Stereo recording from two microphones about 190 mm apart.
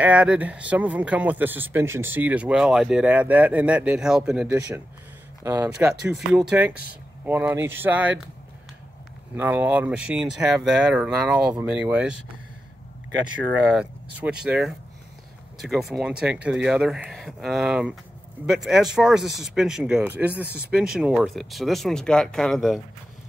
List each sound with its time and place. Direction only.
0.0 s speech: 5° right (ahead or behind)
5.4 s speech: 15° right (ahead or behind)
5.8 s speech: 5° right (ahead or behind)
9.4 s speech: 10° right (ahead or behind)
13.7 s speech: 5° right (ahead or behind)